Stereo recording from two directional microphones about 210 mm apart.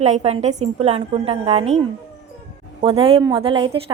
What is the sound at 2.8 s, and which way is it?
Speech, 25° right (ahead or behind).